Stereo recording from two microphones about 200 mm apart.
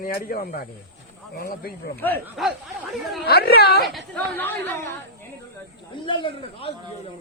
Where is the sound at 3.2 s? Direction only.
50° left (ahead or behind).